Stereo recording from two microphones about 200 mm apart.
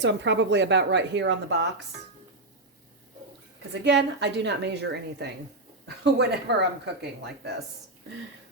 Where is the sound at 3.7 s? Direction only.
60° right (ahead or behind).